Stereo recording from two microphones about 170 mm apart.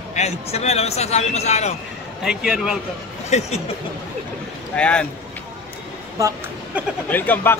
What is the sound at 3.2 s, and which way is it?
Speech, 40° left (ahead or behind).